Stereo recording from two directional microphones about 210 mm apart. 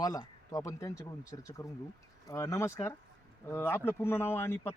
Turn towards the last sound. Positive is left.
turn(degrees=10)  # may be behind; listen again after turning